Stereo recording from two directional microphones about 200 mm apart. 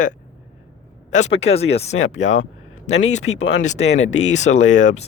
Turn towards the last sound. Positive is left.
turn(degrees=35)  # may be behind; listen again after turning